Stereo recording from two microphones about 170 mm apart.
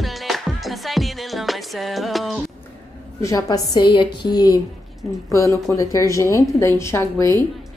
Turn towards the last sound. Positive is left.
turn(degrees=15)  # may be behind; listen again after turning